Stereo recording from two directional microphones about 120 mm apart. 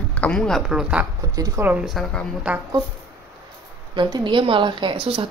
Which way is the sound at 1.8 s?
Centre (ahead or behind).